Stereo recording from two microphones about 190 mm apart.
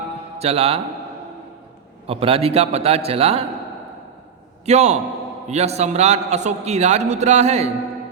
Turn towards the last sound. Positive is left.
turn(degrees=-35)  # may be behind; listen again after turning